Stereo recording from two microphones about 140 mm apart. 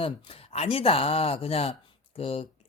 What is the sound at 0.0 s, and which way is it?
Speech, 45° left (ahead or behind).